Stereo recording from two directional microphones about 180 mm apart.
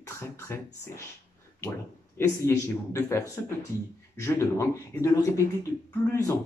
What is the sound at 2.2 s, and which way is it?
Speech, 10° left (ahead or behind).